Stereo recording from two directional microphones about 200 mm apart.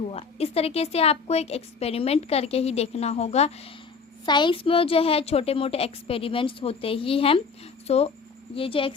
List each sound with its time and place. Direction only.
0.0 s a woman's voice: 30° left (ahead or behind)